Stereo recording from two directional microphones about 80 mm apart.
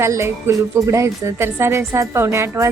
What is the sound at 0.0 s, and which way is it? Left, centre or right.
Speech, right.